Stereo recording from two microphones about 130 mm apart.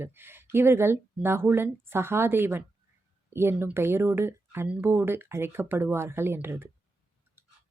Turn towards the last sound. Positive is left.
turn(degrees=-15)  # may be behind; listen again after turning